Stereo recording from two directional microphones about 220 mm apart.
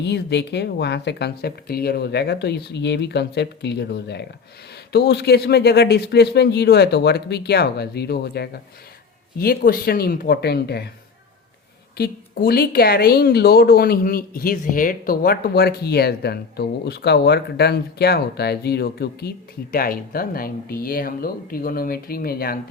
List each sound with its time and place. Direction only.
0.0 s speech: 50° left (ahead or behind)
11.9 s speech: 45° left (ahead or behind)